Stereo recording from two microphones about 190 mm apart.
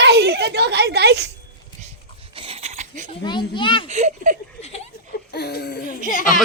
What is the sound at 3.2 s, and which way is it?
Speech, 25° left (ahead or behind).